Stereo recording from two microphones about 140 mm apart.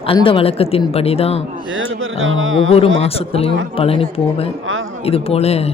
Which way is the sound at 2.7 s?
45° left (ahead or behind).